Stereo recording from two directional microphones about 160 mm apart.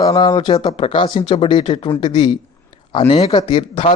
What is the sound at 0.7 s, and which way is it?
Speech, 40° left (ahead or behind).